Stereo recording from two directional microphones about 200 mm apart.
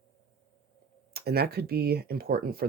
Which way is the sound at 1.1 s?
50° right (ahead or behind).